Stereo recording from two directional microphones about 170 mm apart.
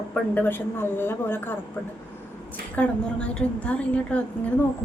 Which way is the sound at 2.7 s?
5° left (ahead or behind).